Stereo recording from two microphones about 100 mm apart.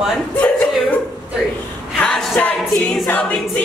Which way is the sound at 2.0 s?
10° left (ahead or behind).